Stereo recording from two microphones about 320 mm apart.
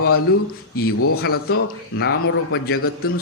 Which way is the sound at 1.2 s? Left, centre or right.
Left.